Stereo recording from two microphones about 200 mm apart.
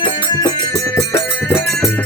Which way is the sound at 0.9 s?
10° left (ahead or behind).